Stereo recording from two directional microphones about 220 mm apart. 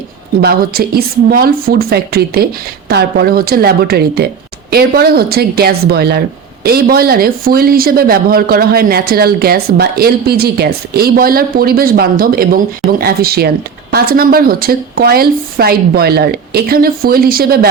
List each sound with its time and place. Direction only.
0.4 s speech: 45° right (ahead or behind)